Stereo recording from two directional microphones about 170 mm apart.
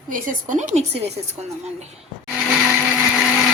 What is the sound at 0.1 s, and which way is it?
Speech, 50° right (ahead or behind).